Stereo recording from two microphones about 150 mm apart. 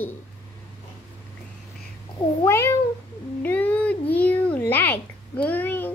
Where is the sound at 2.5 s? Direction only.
15° left (ahead or behind).